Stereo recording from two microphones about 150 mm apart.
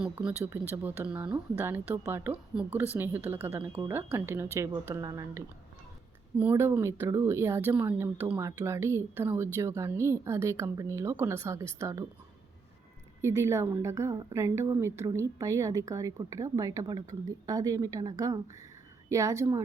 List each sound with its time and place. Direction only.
0.0 s a woman's voice: 10° right (ahead or behind)
6.4 s a woman's voice: 15° right (ahead or behind)
13.2 s a woman's voice: 20° right (ahead or behind)